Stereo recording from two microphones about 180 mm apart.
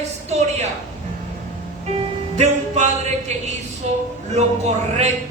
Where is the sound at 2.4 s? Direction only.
40° right (ahead or behind).